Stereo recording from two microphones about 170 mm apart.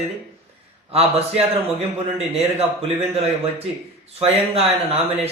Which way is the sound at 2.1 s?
35° right (ahead or behind).